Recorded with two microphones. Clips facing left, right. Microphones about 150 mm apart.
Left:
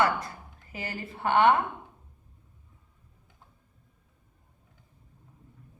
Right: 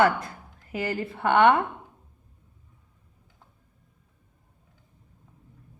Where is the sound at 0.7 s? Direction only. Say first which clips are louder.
Right 8 dB; 60° right (ahead or behind).